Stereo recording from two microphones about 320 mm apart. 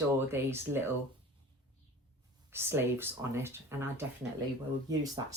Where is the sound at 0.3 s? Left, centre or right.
Centre.